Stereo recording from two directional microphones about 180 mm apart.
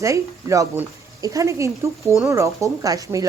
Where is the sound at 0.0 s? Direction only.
15° right (ahead or behind).